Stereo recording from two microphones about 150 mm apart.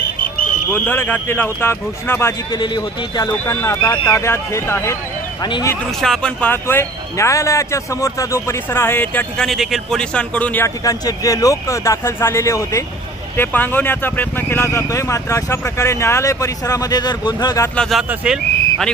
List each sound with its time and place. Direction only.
0.7 s speech: 15° left (ahead or behind)
2.5 s speech: 30° left (ahead or behind)
5.9 s speech: 5° left (ahead or behind)
10.8 s speech: 25° left (ahead or behind)
17.7 s speech: centre (ahead or behind)